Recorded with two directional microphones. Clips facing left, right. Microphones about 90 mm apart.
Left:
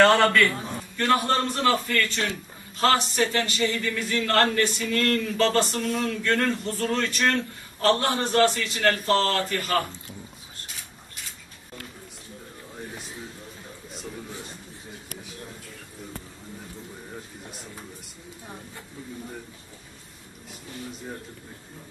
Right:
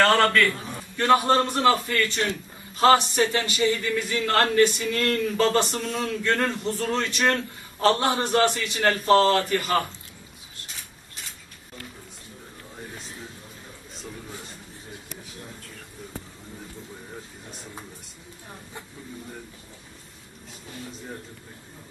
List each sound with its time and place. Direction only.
0.2 s a man's voice: centre (ahead or behind)
0.9 s a man's voice: 20° right (ahead or behind)